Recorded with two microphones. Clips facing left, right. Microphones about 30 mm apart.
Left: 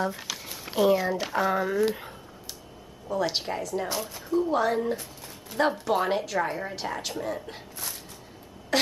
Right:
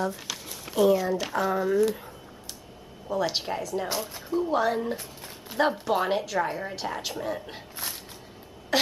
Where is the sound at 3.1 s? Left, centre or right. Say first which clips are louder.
Even; centre.